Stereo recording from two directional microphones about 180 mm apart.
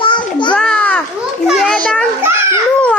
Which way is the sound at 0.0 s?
25° left (ahead or behind).